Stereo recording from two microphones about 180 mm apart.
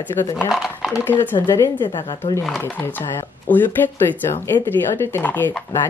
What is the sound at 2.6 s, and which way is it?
A woman's voice, 10° left (ahead or behind).